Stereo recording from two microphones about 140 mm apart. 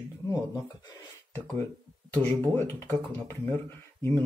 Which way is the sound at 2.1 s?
15° left (ahead or behind).